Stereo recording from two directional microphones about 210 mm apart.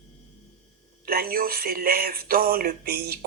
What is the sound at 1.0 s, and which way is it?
Speech, 45° right (ahead or behind).